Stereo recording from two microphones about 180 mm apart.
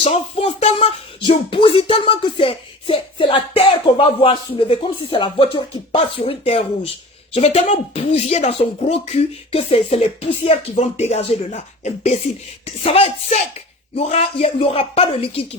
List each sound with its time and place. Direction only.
0.0 s speech: 35° left (ahead or behind)